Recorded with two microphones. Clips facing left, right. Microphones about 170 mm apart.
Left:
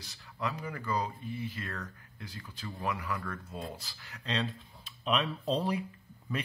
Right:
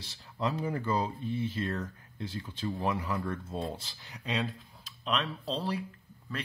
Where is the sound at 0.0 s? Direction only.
25° right (ahead or behind); by 4.5 s 10° right (ahead or behind).